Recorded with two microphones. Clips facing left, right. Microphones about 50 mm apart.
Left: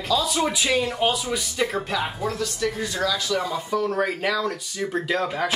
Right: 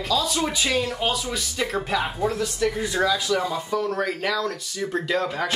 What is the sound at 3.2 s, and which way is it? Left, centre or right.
Speech, centre.